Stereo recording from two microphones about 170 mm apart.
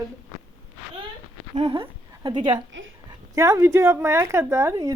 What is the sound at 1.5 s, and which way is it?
A woman's voice, 35° right (ahead or behind).